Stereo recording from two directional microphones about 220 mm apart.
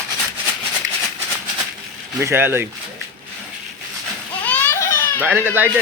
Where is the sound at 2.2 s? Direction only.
10° right (ahead or behind).